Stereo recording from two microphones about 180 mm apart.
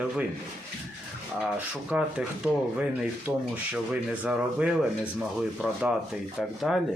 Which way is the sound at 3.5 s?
5° right (ahead or behind).